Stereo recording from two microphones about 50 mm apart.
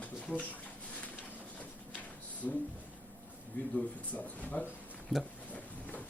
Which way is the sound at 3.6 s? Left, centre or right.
Left.